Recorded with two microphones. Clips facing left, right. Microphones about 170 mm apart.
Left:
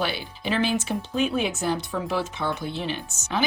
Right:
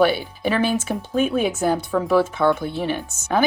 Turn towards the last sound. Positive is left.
turn(degrees=-55)  # may be behind; listen again after turning